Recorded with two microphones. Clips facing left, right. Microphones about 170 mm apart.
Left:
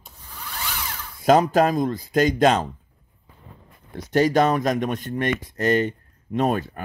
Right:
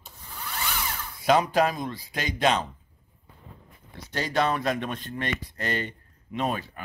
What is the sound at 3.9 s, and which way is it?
Speech, 45° left (ahead or behind).